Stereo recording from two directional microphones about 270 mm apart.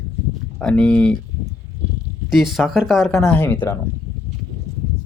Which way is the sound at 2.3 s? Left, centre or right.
Centre.